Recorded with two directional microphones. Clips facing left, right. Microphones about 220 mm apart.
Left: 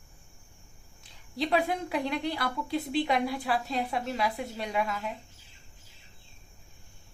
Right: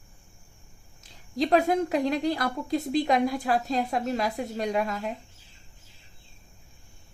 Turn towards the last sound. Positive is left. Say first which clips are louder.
# right 4 dB
turn(degrees=-45)  # may be behind; listen again after turning